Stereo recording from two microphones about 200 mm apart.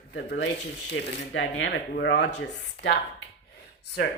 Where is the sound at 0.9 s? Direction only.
70° left (ahead or behind).